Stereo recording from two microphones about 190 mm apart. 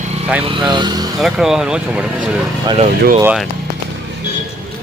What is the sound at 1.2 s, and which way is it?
Speech, centre (ahead or behind).